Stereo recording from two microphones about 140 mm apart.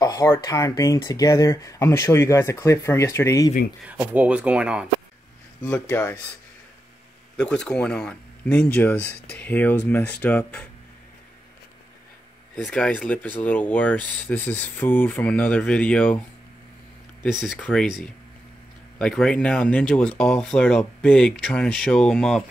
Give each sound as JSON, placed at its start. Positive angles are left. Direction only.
{"t": 0.0, "sound": "speech", "side_deg": 25}
{"t": 3.8, "sound": "speech", "side_deg": -10}
{"t": 5.6, "sound": "speech", "side_deg": 15}
{"t": 7.3, "sound": "speech", "side_deg": 5}
{"t": 12.5, "sound": "speech", "side_deg": 10}
{"t": 17.3, "sound": "speech", "side_deg": -5}